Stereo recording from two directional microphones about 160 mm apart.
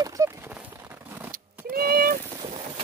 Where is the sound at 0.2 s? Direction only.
20° right (ahead or behind).